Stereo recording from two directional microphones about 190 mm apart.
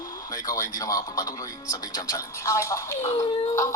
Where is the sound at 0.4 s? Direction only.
15° left (ahead or behind).